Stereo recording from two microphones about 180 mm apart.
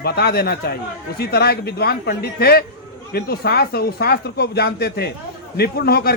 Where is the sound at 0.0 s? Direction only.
60° left (ahead or behind).